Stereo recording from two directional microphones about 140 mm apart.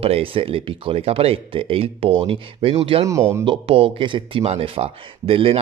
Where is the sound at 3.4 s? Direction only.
40° right (ahead or behind).